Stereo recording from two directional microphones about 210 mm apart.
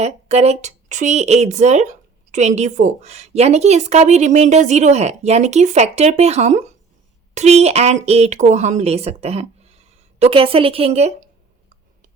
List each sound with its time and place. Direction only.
0.0 s speech: 30° right (ahead or behind)